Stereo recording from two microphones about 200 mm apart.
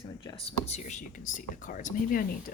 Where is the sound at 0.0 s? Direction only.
25° left (ahead or behind).